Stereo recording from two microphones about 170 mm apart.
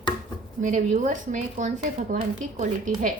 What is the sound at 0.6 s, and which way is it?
Speech, 50° right (ahead or behind).